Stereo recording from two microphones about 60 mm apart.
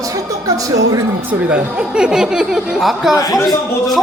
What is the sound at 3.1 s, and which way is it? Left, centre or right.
Speech, left.